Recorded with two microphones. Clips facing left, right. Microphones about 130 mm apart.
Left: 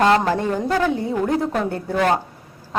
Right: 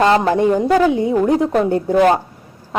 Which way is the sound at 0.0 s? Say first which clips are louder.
Right 4 dB; 15° right (ahead or behind).